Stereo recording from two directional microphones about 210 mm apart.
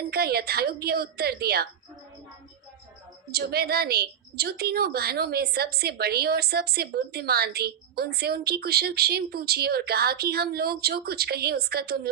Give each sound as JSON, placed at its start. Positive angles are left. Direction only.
{"t": 0.0, "sound": "a woman's voice", "side_deg": -50}
{"t": 3.3, "sound": "a woman's voice", "side_deg": -50}